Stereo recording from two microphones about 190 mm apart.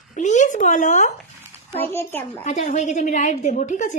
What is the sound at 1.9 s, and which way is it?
Speech, 10° left (ahead or behind).